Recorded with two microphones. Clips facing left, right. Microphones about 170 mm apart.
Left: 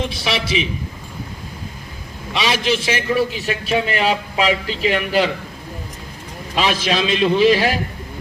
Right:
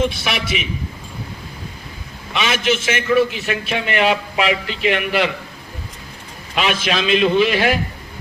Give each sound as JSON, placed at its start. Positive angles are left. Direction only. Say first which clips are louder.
{"t": 0.2, "sound": "a man's voice", "louder": "left 2 dB", "side_deg": 35}
{"t": 2.3, "sound": "a man's voice", "louder": "even", "side_deg": 35}
{"t": 6.6, "sound": "a man's voice", "louder": "left 1 dB", "side_deg": 35}